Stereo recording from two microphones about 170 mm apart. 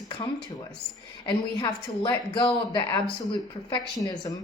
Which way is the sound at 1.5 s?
25° left (ahead or behind).